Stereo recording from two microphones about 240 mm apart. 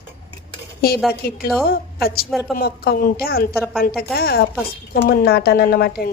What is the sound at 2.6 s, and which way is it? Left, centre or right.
Speech, left.